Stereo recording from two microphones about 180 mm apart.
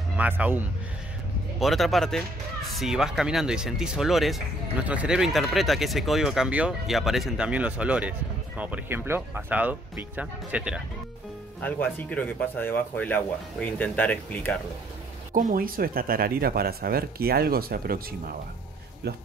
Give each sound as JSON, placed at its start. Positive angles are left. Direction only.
{"t": 0.2, "sound": "speech", "side_deg": -10}
{"t": 1.6, "sound": "speech", "side_deg": 0}
{"t": 11.6, "sound": "speech", "side_deg": 10}
{"t": 15.3, "sound": "speech", "side_deg": -50}
{"t": 19.0, "sound": "speech", "side_deg": -65}